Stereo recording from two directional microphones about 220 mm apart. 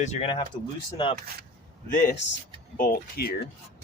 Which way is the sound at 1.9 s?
35° left (ahead or behind).